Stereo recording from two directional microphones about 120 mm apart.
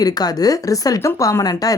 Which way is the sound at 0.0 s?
30° left (ahead or behind).